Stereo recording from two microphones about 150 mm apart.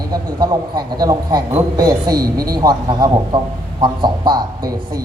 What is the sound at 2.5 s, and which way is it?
A man's voice, 25° right (ahead or behind).